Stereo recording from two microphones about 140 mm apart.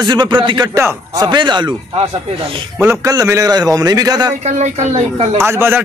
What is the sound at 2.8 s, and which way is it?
A man's voice, 20° right (ahead or behind).